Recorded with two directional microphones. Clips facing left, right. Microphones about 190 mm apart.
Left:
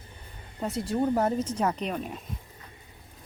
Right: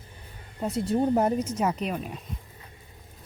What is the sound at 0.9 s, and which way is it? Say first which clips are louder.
Speech: right 2 dB; 20° right (ahead or behind).